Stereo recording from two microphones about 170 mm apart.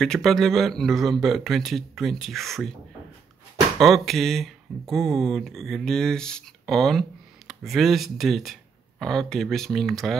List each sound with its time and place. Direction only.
0.0 s speech: centre (ahead or behind)
3.8 s speech: centre (ahead or behind)